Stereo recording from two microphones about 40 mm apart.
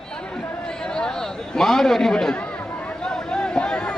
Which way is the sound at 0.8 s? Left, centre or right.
Centre.